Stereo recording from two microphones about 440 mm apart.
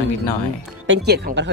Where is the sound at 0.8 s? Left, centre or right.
Right.